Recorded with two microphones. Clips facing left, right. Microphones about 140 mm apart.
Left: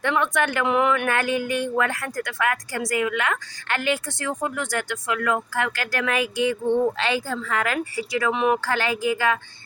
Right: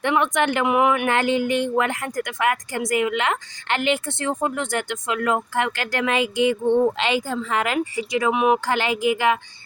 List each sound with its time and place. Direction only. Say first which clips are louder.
0.0 s speech: right 2 dB; 20° right (ahead or behind)